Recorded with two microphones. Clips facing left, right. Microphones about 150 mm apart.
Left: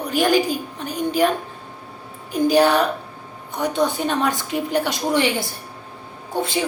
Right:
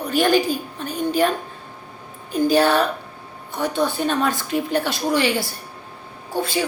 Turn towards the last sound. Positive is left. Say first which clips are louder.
# even
turn(degrees=20)  # may be behind; listen again after turning